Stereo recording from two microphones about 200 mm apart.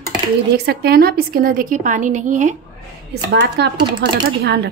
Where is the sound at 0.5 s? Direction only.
50° right (ahead or behind).